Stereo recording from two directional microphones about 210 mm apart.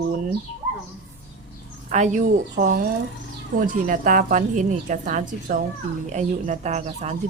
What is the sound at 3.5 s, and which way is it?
Speech, 40° right (ahead or behind).